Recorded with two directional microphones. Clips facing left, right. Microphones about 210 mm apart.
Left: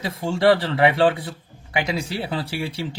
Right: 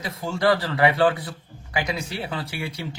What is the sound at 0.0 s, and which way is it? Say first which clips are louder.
Speech: left 4 dB; 30° left (ahead or behind).